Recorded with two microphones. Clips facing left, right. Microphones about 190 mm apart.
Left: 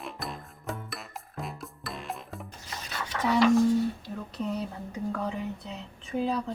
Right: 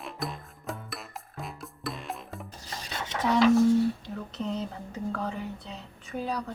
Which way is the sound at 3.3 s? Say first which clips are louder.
Right 1 dB; centre (ahead or behind).